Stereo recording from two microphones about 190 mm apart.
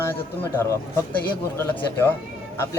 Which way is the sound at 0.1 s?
10° left (ahead or behind).